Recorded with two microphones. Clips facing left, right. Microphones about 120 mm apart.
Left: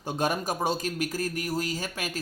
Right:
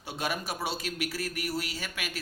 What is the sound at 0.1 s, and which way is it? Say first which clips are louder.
A man's voice: left 6 dB; 45° left (ahead or behind).